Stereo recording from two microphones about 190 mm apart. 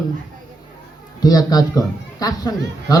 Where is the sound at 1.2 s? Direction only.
20° left (ahead or behind).